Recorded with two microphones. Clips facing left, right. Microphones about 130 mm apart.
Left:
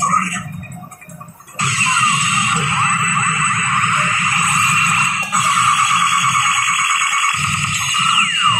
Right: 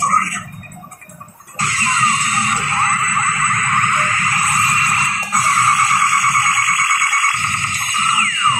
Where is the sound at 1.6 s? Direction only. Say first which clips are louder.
Even; 45° right (ahead or behind).